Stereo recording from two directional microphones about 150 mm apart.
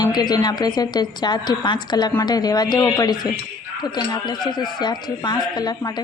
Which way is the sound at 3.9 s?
30° left (ahead or behind).